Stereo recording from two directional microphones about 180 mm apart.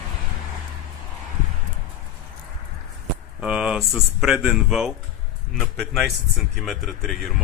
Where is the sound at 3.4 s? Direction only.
5° right (ahead or behind).